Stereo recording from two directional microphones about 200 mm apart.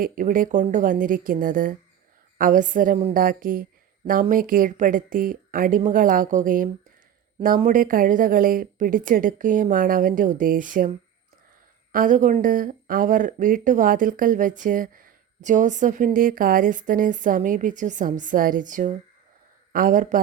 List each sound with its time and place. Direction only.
0.0 s speech: 45° right (ahead or behind)